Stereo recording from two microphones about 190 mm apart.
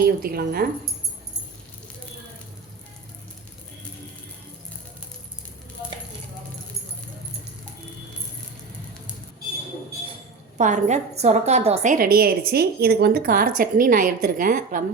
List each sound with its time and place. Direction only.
0.0 s a woman's voice: 50° right (ahead or behind)
10.6 s a woman's voice: 40° right (ahead or behind)